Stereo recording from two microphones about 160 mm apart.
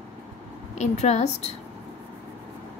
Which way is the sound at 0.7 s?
45° left (ahead or behind).